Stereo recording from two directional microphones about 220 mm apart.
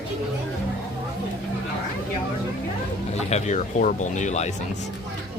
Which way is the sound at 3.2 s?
30° left (ahead or behind).